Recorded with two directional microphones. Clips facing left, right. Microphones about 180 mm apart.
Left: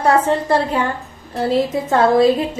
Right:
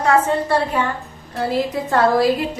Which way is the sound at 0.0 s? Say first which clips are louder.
Left 1 dB; 35° left (ahead or behind).